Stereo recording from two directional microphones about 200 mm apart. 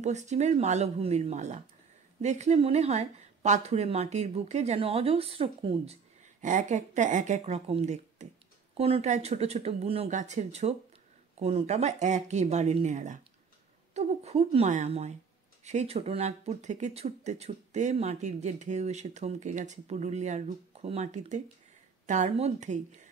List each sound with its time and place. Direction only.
0.0 s speech: 35° right (ahead or behind)